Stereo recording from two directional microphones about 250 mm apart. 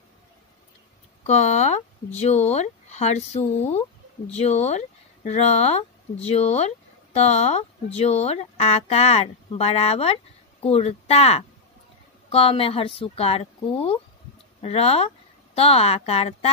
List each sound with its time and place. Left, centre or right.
1.2 s speech: left